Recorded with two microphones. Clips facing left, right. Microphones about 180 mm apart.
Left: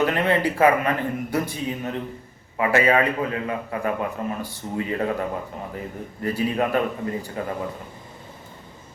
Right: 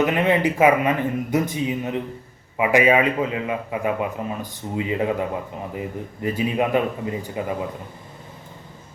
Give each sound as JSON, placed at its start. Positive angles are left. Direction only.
{"t": 0.0, "sound": "a man's voice", "side_deg": -15}